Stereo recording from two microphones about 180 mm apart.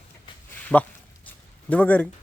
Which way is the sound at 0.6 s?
10° left (ahead or behind).